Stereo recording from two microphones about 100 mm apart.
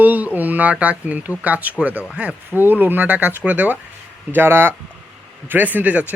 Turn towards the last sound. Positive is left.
turn(degrees=-15)  # may be behind; listen again after turning